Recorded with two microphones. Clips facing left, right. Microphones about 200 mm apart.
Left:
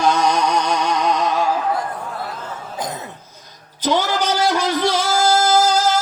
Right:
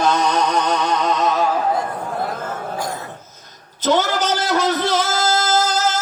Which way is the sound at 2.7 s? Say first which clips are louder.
Right 1 dB; 20° left (ahead or behind).